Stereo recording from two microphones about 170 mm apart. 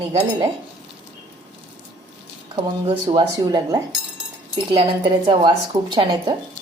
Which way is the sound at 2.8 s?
30° right (ahead or behind).